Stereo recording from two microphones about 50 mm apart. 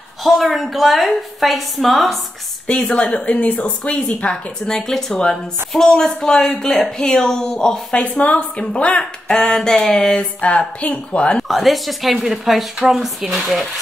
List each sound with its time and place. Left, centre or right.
0.2 s a woman's voice: centre
2.6 s a woman's voice: left
4.6 s speech: centre
8.0 s speech: left
11.4 s a woman's voice: centre